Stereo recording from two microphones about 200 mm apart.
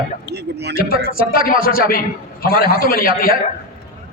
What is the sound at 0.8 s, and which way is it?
A man's voice, 50° left (ahead or behind).